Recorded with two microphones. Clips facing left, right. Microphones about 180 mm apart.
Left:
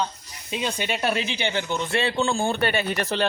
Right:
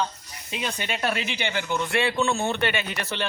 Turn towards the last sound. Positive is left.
turn(degrees=40)  # may be behind; listen again after turning